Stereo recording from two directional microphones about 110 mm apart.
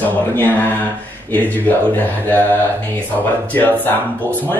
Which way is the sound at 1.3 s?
15° left (ahead or behind).